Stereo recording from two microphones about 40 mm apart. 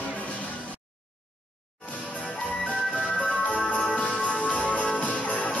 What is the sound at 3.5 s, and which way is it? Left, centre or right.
Music, left.